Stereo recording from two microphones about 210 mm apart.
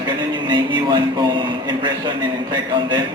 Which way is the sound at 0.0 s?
20° right (ahead or behind).